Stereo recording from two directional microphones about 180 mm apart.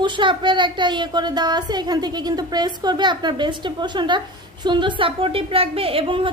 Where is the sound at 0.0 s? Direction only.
25° right (ahead or behind).